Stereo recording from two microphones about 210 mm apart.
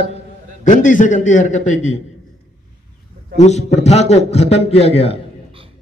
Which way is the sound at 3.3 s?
30° left (ahead or behind).